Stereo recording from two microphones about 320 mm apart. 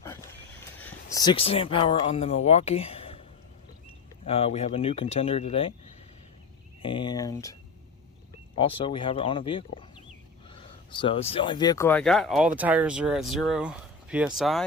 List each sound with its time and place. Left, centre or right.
0.0 s a sound: centre
4.3 s speech: centre
6.8 s speech: centre
8.5 s speech: centre
10.9 s speech: centre